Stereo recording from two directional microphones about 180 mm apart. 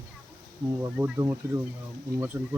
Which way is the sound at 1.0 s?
15° right (ahead or behind).